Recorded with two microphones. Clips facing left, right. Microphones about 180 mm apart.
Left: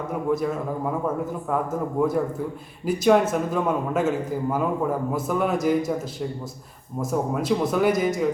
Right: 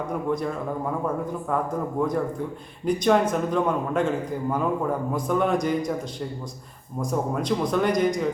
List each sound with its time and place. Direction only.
0.3 s a man's voice: 5° left (ahead or behind)
2.0 s a man's voice: 5° left (ahead or behind)